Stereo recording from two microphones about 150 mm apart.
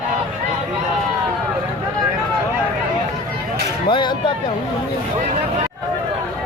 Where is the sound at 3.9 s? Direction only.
30° left (ahead or behind).